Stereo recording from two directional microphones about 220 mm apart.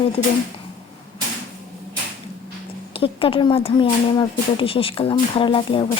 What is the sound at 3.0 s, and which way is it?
A woman's voice, 25° left (ahead or behind).